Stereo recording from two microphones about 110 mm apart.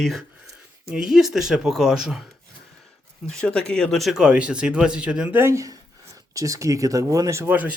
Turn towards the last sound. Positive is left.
turn(degrees=-15)  # may be behind; listen again after turning